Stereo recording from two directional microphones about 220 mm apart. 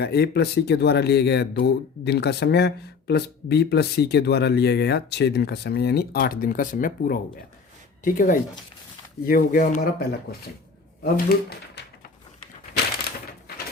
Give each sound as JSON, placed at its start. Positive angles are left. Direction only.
{"t": 0.0, "sound": "speech", "side_deg": 50}